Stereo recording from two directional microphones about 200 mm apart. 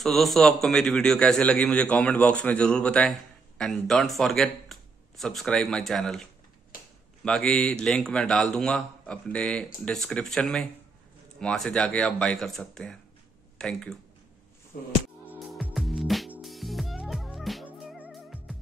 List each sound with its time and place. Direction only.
0.0 s a man's voice: centre (ahead or behind)
7.2 s a man's voice: 5° left (ahead or behind)
14.7 s music: 45° left (ahead or behind)
15.2 s music: 5° right (ahead or behind)